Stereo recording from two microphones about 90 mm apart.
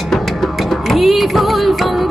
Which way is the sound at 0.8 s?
Centre (ahead or behind).